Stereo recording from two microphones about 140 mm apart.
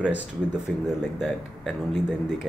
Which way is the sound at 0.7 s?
5° left (ahead or behind).